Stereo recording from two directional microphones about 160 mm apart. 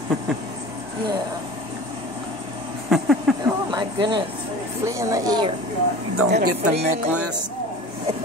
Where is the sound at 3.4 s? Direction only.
25° right (ahead or behind).